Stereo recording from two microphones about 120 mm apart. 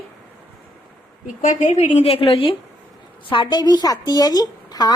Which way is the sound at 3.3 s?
40° left (ahead or behind).